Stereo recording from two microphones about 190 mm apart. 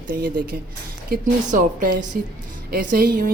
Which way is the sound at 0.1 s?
50° right (ahead or behind).